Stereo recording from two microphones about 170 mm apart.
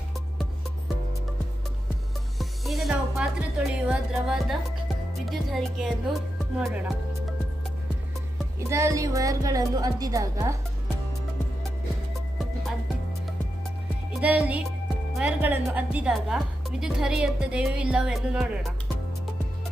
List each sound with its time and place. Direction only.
2.4 s a woman's voice: centre (ahead or behind)
8.5 s a woman's voice: 15° right (ahead or behind)
14.1 s music: 5° right (ahead or behind)
15.1 s a woman's voice: 5° right (ahead or behind)